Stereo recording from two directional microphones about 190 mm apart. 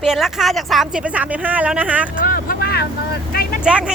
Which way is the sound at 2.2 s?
50° left (ahead or behind).